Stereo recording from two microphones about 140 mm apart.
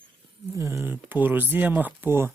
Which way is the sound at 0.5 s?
20° right (ahead or behind).